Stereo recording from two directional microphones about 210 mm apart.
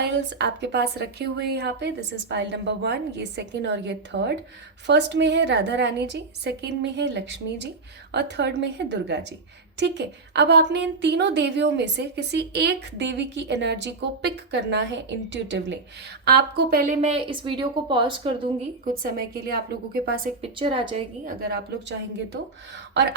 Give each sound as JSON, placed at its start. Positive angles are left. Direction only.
{"t": 0.0, "sound": "a woman's voice", "side_deg": -55}
{"t": 17.0, "sound": "a woman's voice", "side_deg": -25}
{"t": 18.9, "sound": "a woman's voice", "side_deg": -45}
{"t": 20.4, "sound": "a woman's voice", "side_deg": -25}
{"t": 21.2, "sound": "a woman's voice", "side_deg": -50}